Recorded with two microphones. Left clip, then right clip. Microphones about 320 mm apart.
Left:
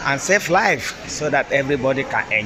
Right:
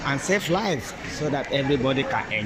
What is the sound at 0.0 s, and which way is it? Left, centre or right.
Speech, centre.